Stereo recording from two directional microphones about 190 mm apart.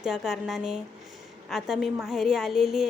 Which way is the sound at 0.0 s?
Centre (ahead or behind).